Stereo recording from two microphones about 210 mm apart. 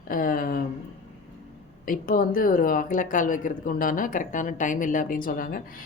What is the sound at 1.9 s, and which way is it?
Speech, 40° left (ahead or behind).